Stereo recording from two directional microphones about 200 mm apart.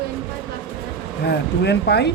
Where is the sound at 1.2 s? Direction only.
55° left (ahead or behind).